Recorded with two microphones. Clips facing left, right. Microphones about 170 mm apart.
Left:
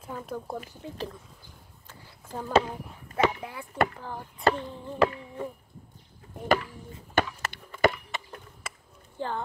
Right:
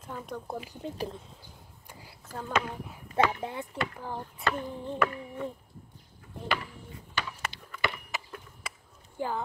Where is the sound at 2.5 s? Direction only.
30° left (ahead or behind).